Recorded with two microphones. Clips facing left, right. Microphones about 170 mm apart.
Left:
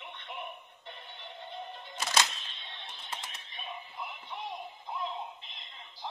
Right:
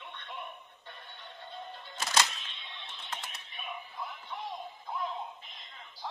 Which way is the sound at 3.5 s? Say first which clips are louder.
Right 1 dB; 35° left (ahead or behind).